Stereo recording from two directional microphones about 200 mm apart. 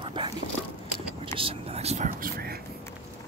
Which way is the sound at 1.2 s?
25° right (ahead or behind).